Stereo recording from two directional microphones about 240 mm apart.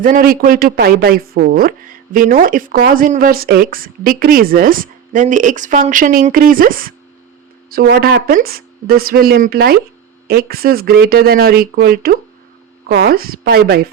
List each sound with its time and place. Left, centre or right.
0.0 s speech: right